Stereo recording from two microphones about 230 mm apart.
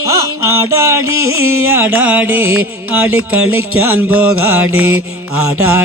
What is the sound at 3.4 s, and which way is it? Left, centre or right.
Music, right.